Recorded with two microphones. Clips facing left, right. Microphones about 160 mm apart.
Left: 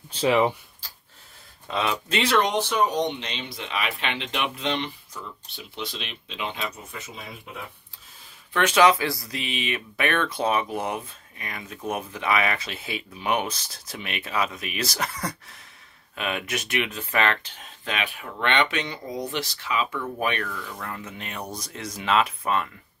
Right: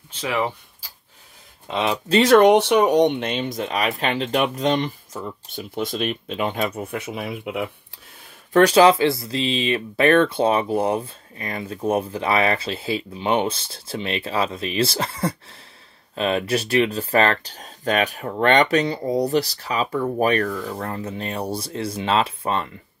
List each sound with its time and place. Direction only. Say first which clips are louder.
0.1 s speech: left 4 dB; 25° left (ahead or behind)
1.7 s speech: right 6 dB; 25° right (ahead or behind)
2.3 s speech: right 10 dB; 65° right (ahead or behind)
8.5 s speech: right 6 dB; 35° right (ahead or behind)